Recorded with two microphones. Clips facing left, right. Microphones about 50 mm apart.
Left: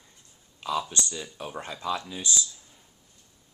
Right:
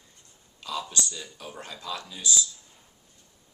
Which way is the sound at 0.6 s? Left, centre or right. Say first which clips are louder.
Left 3 dB; left.